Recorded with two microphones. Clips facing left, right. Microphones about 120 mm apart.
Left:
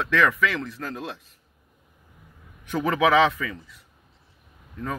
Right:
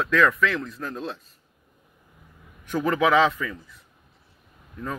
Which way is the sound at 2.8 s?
80° left.